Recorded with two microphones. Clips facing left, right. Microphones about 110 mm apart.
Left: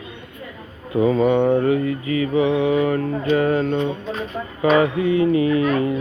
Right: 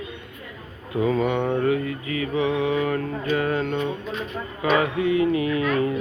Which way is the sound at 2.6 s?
10° left (ahead or behind).